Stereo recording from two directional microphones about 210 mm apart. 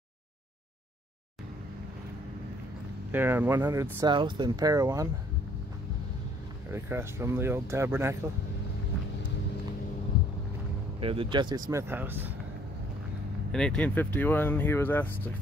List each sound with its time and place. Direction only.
3.1 s speech: 10° right (ahead or behind)
6.7 s speech: 10° right (ahead or behind)
11.0 s speech: 25° right (ahead or behind); by 12.3 s 10° right (ahead or behind)
13.5 s speech: 5° left (ahead or behind)